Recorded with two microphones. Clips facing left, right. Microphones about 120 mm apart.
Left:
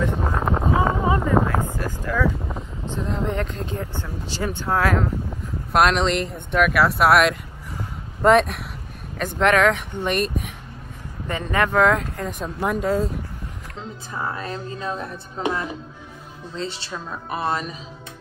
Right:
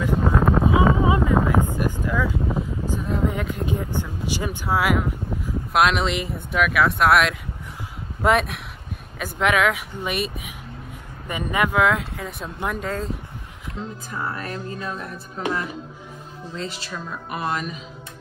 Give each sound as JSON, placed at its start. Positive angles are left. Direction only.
{"t": 0.3, "sound": "wind noise", "side_deg": 10}
{"t": 1.0, "sound": "a sound", "side_deg": -10}
{"t": 8.2, "sound": "speech", "side_deg": 0}
{"t": 14.1, "sound": "a woman's voice", "side_deg": 20}